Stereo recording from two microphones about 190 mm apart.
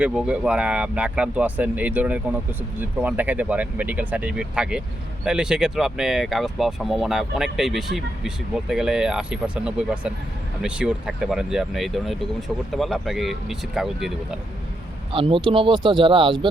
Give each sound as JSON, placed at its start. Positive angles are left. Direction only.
{"t": 0.0, "sound": "speech", "side_deg": -5}
{"t": 15.1, "sound": "speech", "side_deg": -30}